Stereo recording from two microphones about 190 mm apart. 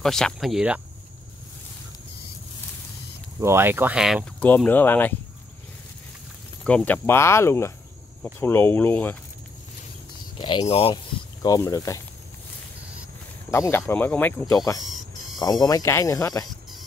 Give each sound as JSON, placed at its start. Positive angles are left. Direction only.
{"t": 0.0, "sound": "speech", "side_deg": 0}
{"t": 3.3, "sound": "speech", "side_deg": -15}
{"t": 6.6, "sound": "speech", "side_deg": 5}
{"t": 10.4, "sound": "speech", "side_deg": 25}
{"t": 11.4, "sound": "speech", "side_deg": 20}
{"t": 13.5, "sound": "speech", "side_deg": 15}
{"t": 14.8, "sound": "a sound", "side_deg": 0}
{"t": 15.6, "sound": "speech", "side_deg": 15}